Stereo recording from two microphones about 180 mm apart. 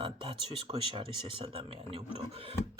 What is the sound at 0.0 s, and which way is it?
Speech, 30° right (ahead or behind).